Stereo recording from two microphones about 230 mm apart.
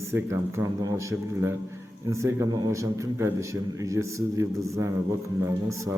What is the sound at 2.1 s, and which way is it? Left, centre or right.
A man's voice, centre.